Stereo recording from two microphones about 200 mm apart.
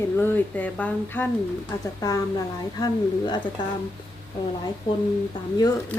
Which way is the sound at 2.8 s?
20° left (ahead or behind).